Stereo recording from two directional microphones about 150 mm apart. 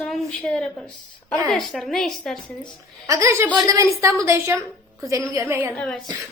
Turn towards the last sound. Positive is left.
turn(degrees=10)  # may be behind; listen again after turning